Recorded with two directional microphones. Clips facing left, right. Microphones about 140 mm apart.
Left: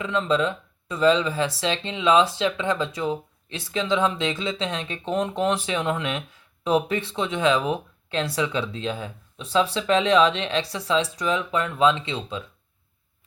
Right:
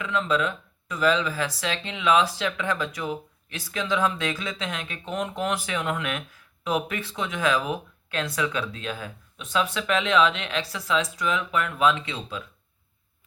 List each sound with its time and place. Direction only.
0.0 s speech: 30° left (ahead or behind)